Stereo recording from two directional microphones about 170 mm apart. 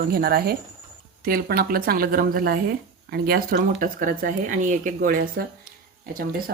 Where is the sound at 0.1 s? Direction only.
65° right (ahead or behind).